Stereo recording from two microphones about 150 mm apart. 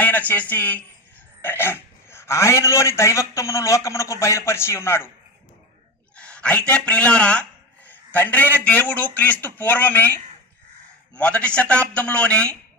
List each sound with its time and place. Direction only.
0.0 s a man's voice: 10° left (ahead or behind)
6.1 s a man's voice: 5° left (ahead or behind)